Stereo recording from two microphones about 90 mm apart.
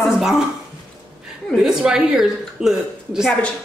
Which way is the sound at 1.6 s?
5° right (ahead or behind).